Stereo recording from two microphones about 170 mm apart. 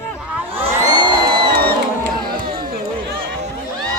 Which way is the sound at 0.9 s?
25° right (ahead or behind).